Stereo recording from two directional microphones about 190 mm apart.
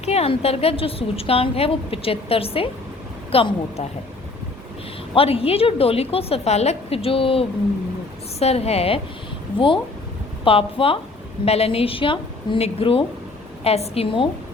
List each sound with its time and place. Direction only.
0.0 s a woman's voice: 35° left (ahead or behind)
5.1 s a woman's voice: 30° left (ahead or behind)